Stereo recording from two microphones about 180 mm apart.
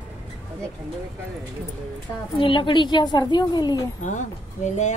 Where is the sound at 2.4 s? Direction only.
30° left (ahead or behind).